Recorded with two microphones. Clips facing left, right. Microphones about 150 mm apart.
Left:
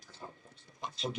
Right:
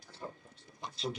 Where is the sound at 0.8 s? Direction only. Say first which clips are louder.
Even; 20° left (ahead or behind).